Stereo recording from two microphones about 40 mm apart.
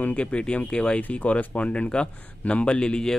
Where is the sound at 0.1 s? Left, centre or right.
Left.